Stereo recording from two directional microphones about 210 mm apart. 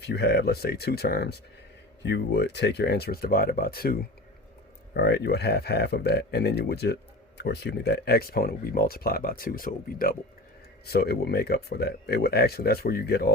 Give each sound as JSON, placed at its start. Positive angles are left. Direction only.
{"t": 0.0, "sound": "speech", "side_deg": 50}